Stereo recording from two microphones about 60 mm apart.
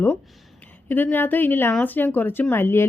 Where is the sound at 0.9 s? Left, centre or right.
Left.